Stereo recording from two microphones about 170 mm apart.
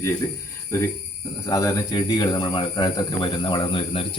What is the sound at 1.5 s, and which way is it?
Speech, 15° left (ahead or behind).